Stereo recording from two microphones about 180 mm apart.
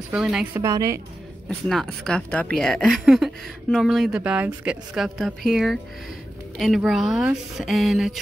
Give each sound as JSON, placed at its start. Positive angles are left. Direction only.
{"t": 0.1, "sound": "speech", "side_deg": -5}
{"t": 0.6, "sound": "a woman's voice", "side_deg": -15}
{"t": 1.7, "sound": "speech", "side_deg": 0}